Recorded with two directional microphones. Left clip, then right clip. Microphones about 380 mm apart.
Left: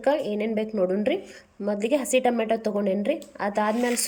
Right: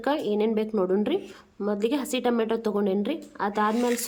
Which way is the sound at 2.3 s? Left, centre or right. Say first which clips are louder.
Left 1 dB; centre.